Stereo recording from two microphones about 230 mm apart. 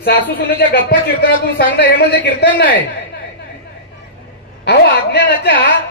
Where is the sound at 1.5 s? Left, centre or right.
Left.